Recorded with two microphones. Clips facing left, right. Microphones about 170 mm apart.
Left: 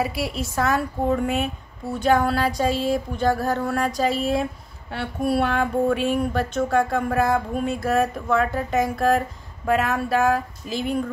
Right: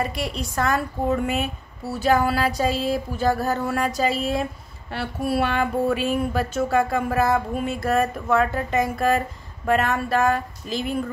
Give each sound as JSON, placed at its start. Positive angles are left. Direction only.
{"t": 0.0, "sound": "a woman's voice", "side_deg": 5}